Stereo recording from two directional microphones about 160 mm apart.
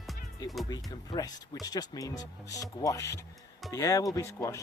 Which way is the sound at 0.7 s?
25° left (ahead or behind).